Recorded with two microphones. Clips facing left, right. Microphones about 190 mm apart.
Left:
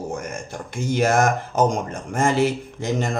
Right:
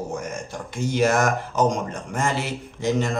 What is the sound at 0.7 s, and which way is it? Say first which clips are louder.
A man's voice: left 1 dB; 50° left (ahead or behind).